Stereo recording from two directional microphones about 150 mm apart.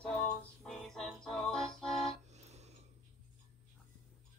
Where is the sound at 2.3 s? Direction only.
45° right (ahead or behind).